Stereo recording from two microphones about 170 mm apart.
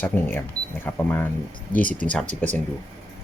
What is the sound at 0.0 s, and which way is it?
Speech, 10° left (ahead or behind).